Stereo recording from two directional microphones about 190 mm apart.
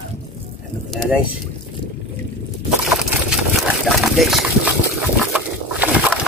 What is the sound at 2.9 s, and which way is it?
Vehicle, 5° right (ahead or behind).